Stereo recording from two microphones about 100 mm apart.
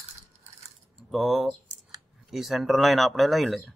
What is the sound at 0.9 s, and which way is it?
Speech, centre (ahead or behind).